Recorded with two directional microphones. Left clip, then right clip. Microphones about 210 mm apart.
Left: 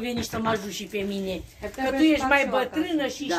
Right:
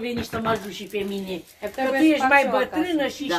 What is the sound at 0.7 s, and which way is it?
Speech, 55° left (ahead or behind).